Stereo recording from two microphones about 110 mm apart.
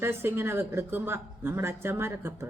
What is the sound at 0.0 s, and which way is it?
A woman's voice, 20° right (ahead or behind).